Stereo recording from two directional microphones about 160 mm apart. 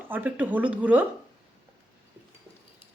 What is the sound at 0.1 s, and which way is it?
Speech, 10° right (ahead or behind).